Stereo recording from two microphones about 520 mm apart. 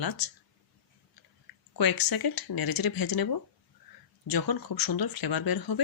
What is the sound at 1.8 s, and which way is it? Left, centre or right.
Speech, left.